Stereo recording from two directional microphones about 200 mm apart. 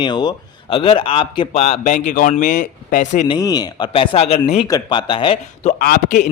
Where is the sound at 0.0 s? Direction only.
20° left (ahead or behind); by 3.2 s 35° left (ahead or behind).